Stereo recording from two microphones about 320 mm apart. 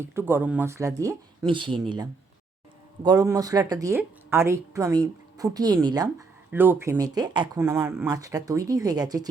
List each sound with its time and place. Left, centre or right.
0.0 s speech: centre
3.0 s speech: centre